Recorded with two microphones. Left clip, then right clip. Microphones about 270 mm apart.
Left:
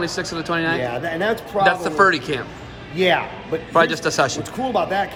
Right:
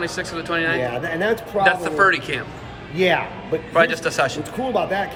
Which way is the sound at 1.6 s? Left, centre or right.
Centre.